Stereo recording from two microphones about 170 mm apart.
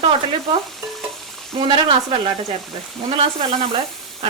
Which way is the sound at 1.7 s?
30° right (ahead or behind).